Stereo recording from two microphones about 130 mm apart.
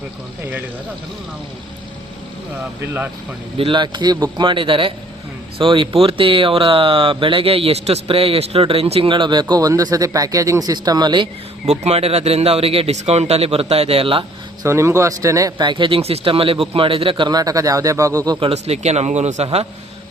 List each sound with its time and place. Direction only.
3.6 s speech: 40° right (ahead or behind)
11.6 s speech: 55° right (ahead or behind)
14.6 s speech: 20° right (ahead or behind)
18.3 s a man's voice: 50° right (ahead or behind)